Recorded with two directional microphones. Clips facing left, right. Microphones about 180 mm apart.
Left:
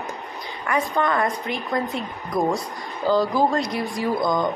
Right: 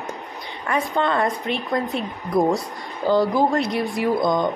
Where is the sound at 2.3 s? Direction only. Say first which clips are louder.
Right 3 dB; 25° right (ahead or behind).